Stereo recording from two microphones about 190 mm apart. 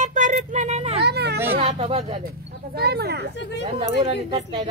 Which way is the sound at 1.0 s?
60° right (ahead or behind).